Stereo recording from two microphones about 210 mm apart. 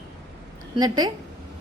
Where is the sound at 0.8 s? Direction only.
20° right (ahead or behind).